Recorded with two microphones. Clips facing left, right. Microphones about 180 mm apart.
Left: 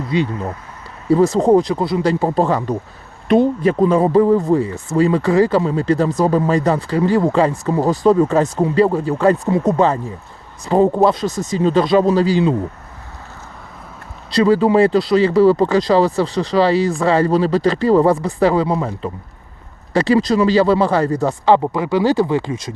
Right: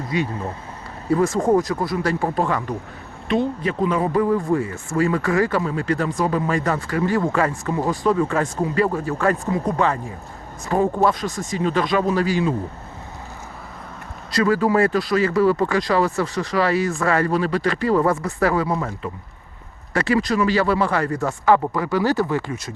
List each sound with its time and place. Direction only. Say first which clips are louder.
0.1 s speech: left 5 dB; 30° left (ahead or behind)
3.2 s speech: left 8 dB; 40° left (ahead or behind)
4.7 s speech: left 5 dB; 20° left (ahead or behind)
14.3 s speech: left 5 dB; 25° left (ahead or behind)
19.9 s speech: left 5 dB; 35° left (ahead or behind)